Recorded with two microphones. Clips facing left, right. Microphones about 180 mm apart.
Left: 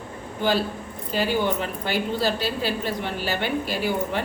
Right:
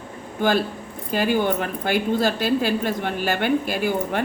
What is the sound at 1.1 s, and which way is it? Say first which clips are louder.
A woman's voice: right 3 dB; 50° right (ahead or behind).